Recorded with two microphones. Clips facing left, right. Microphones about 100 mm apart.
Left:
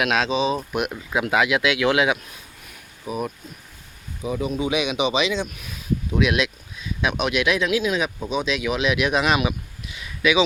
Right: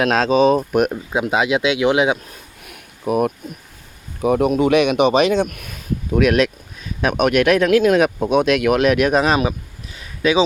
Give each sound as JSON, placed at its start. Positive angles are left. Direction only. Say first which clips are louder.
{"t": 0.0, "sound": "speech", "louder": "right 7 dB", "side_deg": -40}
{"t": 0.9, "sound": "speech", "louder": "right 3 dB", "side_deg": -25}
{"t": 3.1, "sound": "speech", "louder": "right 10 dB", "side_deg": -60}